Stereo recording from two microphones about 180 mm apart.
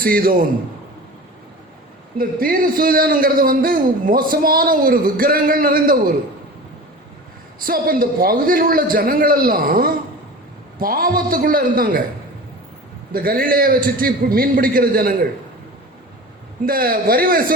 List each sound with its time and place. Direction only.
0.0 s a man's voice: 55° right (ahead or behind)
2.1 s a man's voice: 55° right (ahead or behind)
7.6 s a man's voice: 50° right (ahead or behind)
13.1 s a man's voice: 55° right (ahead or behind)
16.6 s a man's voice: 55° right (ahead or behind)